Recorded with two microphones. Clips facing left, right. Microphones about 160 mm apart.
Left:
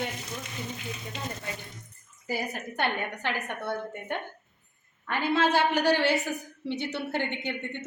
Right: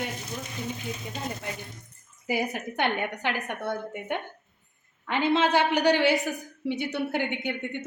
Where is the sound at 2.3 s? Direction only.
15° right (ahead or behind).